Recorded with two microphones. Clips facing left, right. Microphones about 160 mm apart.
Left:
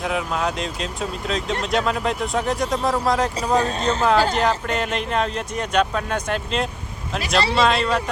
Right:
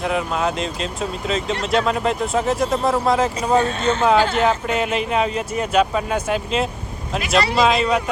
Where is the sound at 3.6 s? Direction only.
35° left (ahead or behind).